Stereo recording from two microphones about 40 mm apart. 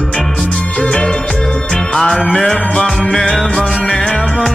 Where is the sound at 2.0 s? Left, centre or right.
Centre.